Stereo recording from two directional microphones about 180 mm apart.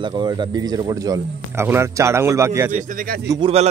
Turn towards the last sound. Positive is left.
turn(degrees=-25)  # may be behind; listen again after turning